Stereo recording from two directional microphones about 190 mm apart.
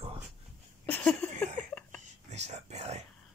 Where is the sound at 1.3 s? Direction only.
40° right (ahead or behind).